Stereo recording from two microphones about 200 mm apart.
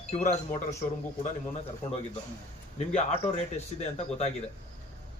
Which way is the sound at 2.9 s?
30° left (ahead or behind).